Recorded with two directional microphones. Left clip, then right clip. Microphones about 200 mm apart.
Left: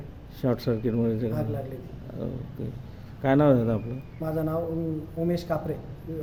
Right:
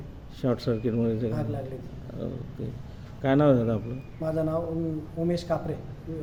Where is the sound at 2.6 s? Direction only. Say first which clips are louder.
Even; 5° left (ahead or behind).